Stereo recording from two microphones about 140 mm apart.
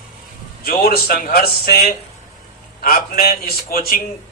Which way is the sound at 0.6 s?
90° left.